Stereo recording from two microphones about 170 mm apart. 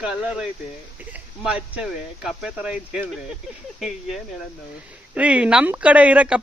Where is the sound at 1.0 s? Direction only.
5° right (ahead or behind).